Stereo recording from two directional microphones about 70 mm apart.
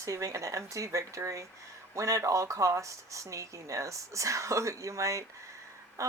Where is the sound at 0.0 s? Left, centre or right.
Right.